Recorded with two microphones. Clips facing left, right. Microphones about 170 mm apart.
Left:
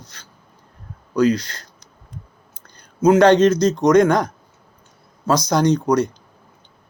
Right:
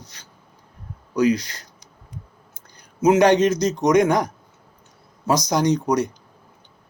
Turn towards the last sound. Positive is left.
turn(degrees=-15)  # may be behind; listen again after turning